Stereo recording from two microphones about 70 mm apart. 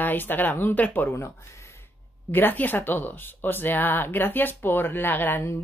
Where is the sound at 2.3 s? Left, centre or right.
Left.